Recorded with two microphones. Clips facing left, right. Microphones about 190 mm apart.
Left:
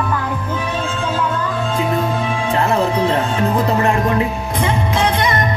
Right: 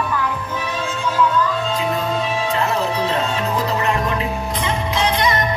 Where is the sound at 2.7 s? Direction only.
55° left (ahead or behind).